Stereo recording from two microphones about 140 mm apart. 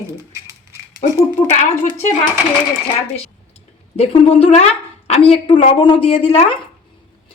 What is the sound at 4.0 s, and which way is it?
A woman's voice, 45° left (ahead or behind).